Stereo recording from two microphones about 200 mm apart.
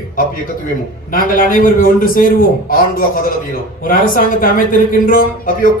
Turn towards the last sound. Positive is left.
turn(degrees=45)  # may be behind; listen again after turning